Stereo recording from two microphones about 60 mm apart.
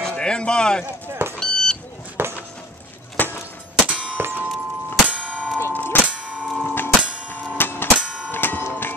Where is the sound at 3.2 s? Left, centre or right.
Left.